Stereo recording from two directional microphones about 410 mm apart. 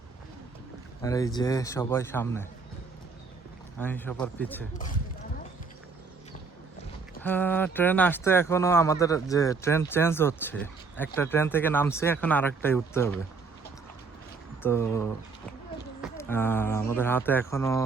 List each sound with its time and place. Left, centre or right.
1.0 s a man's voice: centre
3.8 s speech: centre
7.2 s speech: centre
14.6 s speech: centre